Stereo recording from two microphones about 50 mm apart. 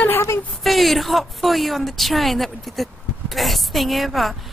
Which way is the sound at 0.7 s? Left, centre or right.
Centre.